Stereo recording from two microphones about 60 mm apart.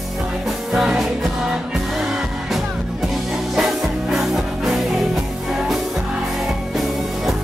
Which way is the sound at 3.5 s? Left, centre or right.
Centre.